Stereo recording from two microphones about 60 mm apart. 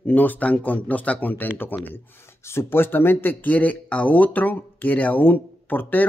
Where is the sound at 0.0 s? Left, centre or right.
Left.